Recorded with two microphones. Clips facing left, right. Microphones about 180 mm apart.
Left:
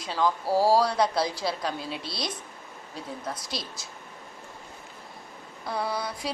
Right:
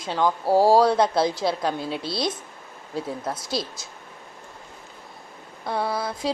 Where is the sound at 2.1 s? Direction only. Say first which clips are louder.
Right 8 dB; centre (ahead or behind).